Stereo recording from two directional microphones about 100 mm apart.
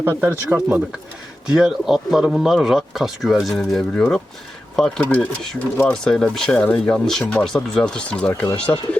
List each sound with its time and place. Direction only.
0.0 s speech: 25° right (ahead or behind)
1.5 s speech: 5° right (ahead or behind); by 9.0 s 10° left (ahead or behind)